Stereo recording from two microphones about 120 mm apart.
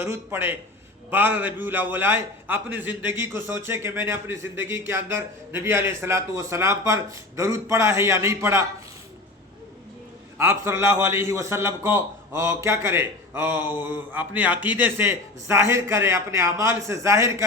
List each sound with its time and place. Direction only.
0.0 s a man's voice: 20° right (ahead or behind)
10.3 s a man's voice: 20° right (ahead or behind)